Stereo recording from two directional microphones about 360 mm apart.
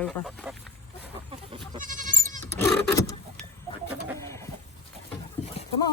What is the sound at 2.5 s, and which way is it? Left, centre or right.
Vehicle, centre.